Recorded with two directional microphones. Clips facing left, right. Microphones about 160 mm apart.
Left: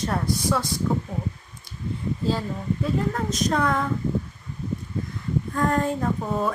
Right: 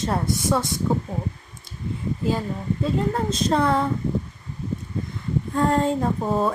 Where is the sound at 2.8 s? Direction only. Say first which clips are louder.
Right 3 dB; 25° right (ahead or behind).